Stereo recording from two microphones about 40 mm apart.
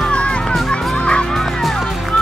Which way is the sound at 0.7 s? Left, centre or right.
Left.